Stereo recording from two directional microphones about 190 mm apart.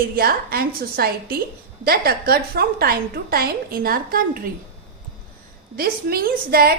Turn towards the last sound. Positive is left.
turn(degrees=-55)  # may be behind; listen again after turning